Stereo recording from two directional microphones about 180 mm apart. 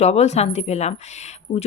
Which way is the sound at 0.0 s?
35° left (ahead or behind).